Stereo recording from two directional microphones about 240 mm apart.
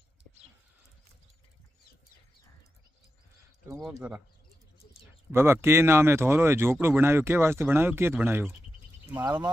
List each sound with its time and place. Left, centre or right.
3.6 s speech: centre
5.3 s speech: centre